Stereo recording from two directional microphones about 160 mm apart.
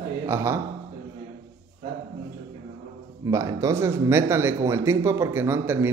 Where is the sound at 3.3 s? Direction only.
20° right (ahead or behind).